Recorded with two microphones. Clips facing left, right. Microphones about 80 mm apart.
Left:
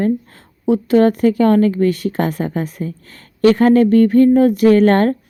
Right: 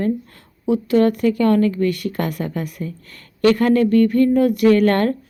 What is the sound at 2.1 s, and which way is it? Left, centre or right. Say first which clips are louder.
A woman's voice: left 4 dB; left.